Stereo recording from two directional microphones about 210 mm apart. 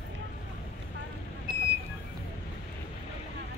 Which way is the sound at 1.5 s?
40° right (ahead or behind).